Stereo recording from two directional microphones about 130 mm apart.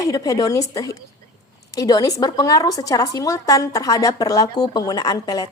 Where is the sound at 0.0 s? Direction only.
25° left (ahead or behind).